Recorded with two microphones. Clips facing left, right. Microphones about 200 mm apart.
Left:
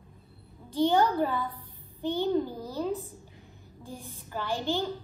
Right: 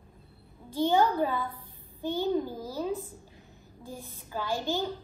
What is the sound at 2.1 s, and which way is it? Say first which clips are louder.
Speech: left 1 dB; 15° right (ahead or behind).